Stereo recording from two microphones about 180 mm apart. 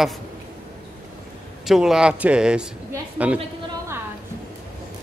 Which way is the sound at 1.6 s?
Centre (ahead or behind).